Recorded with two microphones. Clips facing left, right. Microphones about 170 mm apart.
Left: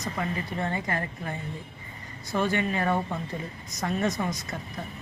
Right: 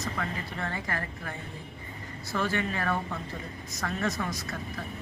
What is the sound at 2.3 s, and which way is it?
Speech, 20° left (ahead or behind).